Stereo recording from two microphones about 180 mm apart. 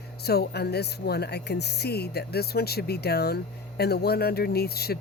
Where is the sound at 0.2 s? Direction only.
60° left (ahead or behind).